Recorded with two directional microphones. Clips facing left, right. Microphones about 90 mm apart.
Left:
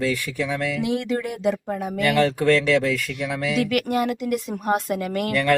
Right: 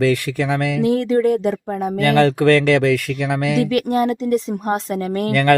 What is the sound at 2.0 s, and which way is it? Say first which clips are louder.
Speech: right 5 dB; 60° right (ahead or behind).